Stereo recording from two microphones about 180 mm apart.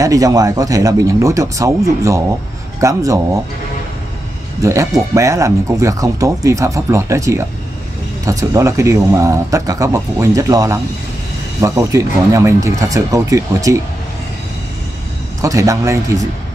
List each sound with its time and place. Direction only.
0.0 s speech: 20° right (ahead or behind)
4.6 s speech: 15° right (ahead or behind)
15.4 s speech: 20° right (ahead or behind)